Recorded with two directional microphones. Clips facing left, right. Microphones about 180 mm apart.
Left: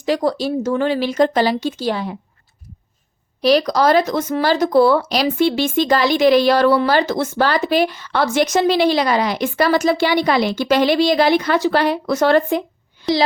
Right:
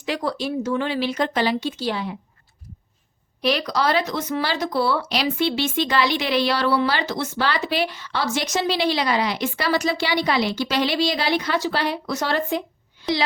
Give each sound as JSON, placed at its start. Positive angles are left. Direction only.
{"t": 0.0, "sound": "a woman's voice", "side_deg": 40}
{"t": 3.4, "sound": "speech", "side_deg": 40}